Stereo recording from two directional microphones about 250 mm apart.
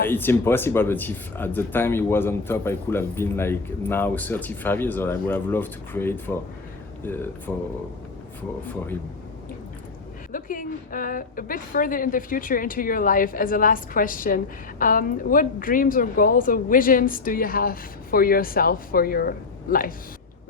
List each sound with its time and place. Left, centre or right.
0.1 s speech: centre
10.3 s a woman's voice: left